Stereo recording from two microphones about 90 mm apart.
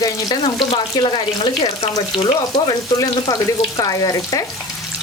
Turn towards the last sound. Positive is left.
turn(degrees=45)  # may be behind; listen again after turning